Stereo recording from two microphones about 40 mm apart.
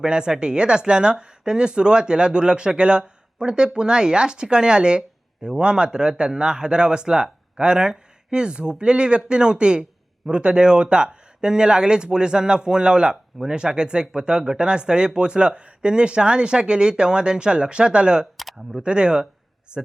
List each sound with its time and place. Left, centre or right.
0.0 s speech: right